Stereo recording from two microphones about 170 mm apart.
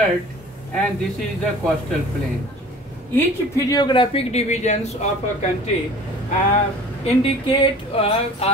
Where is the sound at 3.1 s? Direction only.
15° left (ahead or behind); by 4.8 s 45° left (ahead or behind).